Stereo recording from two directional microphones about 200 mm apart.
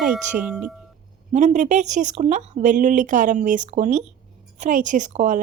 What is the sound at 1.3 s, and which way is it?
A woman's voice, 35° right (ahead or behind).